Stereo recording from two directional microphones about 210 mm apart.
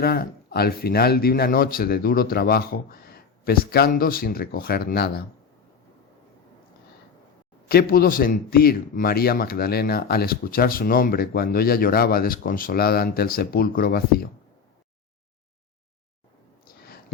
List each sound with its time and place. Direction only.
0.0 s a man's voice: 45° left (ahead or behind)
7.7 s a man's voice: 45° left (ahead or behind)